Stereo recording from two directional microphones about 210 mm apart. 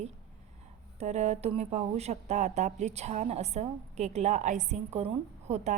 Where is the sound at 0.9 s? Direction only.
30° right (ahead or behind).